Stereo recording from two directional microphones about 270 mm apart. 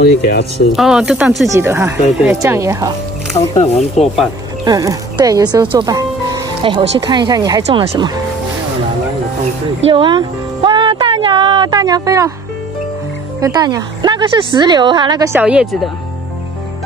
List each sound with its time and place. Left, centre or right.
0.0 s speech: left
0.7 s a woman's voice: centre
3.3 s speech: left
4.6 s a woman's voice: centre
9.8 s music: centre
13.4 s a woman's voice: centre